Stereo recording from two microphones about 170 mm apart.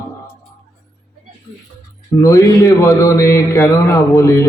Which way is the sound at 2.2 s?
15° left (ahead or behind).